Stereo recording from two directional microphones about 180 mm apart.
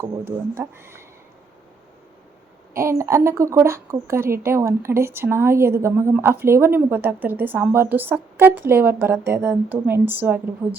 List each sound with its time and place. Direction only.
0.5 s speech: 15° right (ahead or behind)
2.7 s speech: 15° right (ahead or behind)